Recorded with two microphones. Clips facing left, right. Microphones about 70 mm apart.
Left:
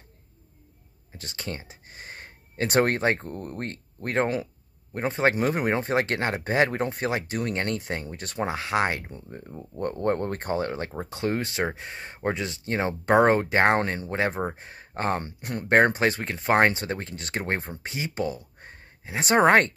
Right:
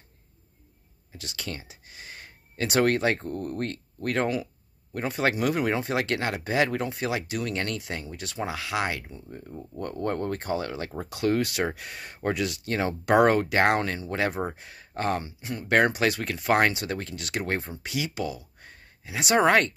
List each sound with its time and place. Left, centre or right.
1.1 s speech: left
15.7 s speech: left